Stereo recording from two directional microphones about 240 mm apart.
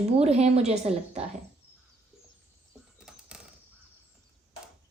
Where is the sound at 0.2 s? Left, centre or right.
Right.